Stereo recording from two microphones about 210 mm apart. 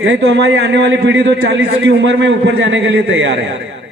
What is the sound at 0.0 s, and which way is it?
A man's voice, 60° right (ahead or behind).